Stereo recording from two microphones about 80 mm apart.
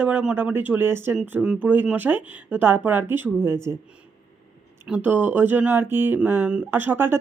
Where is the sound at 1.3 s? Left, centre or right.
Centre.